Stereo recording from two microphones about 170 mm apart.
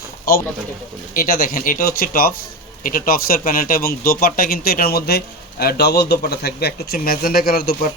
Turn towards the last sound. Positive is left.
turn(degrees=65)  # may be behind; listen again after turning